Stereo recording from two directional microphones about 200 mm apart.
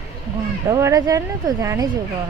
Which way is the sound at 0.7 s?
15° right (ahead or behind).